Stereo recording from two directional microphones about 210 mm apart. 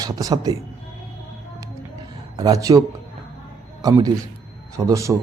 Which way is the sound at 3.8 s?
15° right (ahead or behind).